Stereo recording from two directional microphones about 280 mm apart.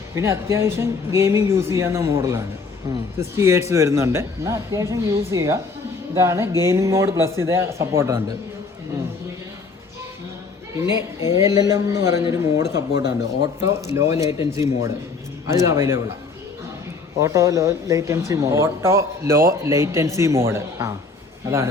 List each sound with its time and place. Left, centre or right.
0.2 s a man's voice: centre
10.8 s a man's voice: centre
12.9 s speech: left
13.4 s a man's voice: centre
17.2 s a man's voice: centre